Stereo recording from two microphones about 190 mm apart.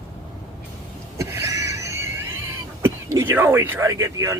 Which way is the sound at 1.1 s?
15° right (ahead or behind).